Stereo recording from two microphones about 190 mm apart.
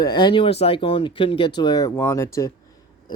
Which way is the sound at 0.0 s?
20° left (ahead or behind).